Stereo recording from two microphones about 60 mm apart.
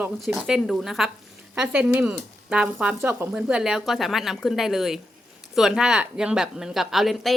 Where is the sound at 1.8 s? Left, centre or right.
Right.